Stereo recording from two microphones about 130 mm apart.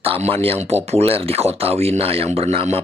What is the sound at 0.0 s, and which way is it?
Speech, 50° right (ahead or behind).